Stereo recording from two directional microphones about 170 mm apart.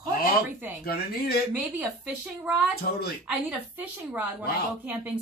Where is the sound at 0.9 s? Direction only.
65° left (ahead or behind).